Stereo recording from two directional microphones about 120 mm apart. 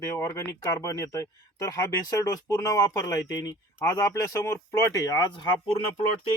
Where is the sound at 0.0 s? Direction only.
25° left (ahead or behind).